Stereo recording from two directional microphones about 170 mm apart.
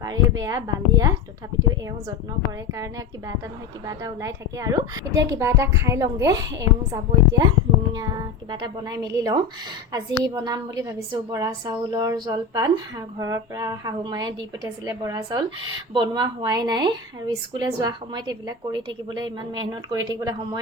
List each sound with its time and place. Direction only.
0.0 s speech: 20° right (ahead or behind)
2.7 s speech: 20° right (ahead or behind)
8.4 s speech: 25° right (ahead or behind)